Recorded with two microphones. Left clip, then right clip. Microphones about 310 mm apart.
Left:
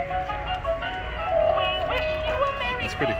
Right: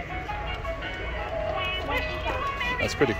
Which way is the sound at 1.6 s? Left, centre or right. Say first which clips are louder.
Left 4 dB; centre.